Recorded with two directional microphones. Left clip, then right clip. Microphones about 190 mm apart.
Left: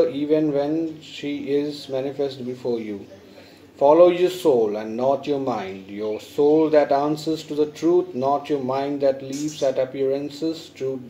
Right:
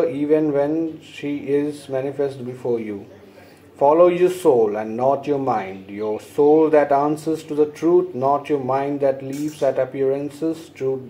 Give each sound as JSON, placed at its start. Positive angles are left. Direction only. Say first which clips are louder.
{"t": 0.1, "sound": "a man's voice", "louder": "right 2 dB", "side_deg": -20}
{"t": 3.8, "sound": "a man's voice", "louder": "even", "side_deg": -15}